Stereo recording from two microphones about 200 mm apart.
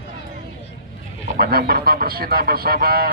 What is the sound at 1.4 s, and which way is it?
A man's voice, 50° right (ahead or behind).